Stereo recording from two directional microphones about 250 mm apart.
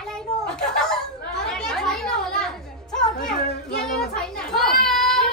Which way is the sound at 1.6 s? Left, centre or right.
Centre.